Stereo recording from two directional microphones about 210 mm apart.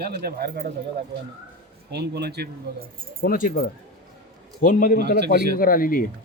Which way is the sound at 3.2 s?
40° left (ahead or behind).